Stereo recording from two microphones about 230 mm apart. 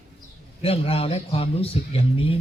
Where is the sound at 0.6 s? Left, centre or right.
Left.